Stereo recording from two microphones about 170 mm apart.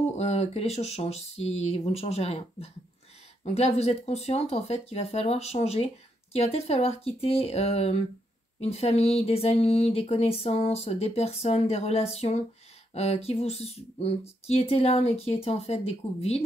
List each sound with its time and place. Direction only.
0.2 s speech: 40° left (ahead or behind)